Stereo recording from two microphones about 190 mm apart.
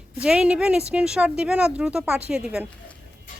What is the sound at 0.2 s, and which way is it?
Speech, 5° right (ahead or behind).